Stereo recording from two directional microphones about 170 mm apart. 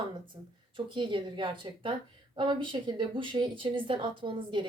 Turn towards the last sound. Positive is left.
turn(degrees=-30)  # may be behind; listen again after turning